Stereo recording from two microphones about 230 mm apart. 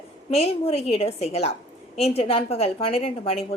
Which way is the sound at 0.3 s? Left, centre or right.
Left.